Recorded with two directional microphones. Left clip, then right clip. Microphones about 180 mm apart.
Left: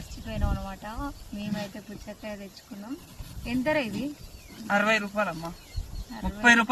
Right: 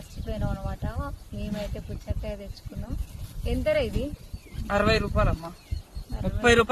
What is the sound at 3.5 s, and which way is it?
Speech, 15° right (ahead or behind).